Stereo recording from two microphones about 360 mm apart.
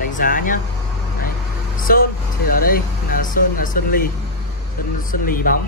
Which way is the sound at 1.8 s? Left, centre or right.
Left.